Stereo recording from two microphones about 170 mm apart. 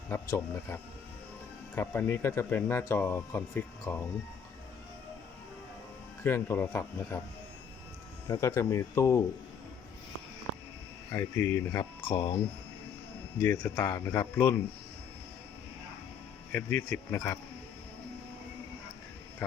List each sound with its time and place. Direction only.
0.1 s speech: 15° left (ahead or behind)
6.2 s speech: 15° left (ahead or behind)
8.3 s speech: 15° left (ahead or behind)
11.1 s speech: 15° left (ahead or behind)
13.4 s speech: 15° left (ahead or behind)
16.5 s speech: 10° left (ahead or behind)